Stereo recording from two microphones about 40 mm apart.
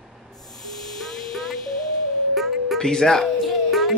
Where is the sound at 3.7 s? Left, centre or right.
Centre.